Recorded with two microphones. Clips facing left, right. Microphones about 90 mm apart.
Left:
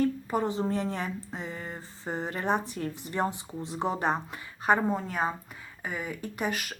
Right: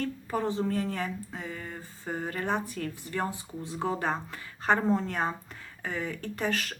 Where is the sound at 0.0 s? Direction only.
15° left (ahead or behind).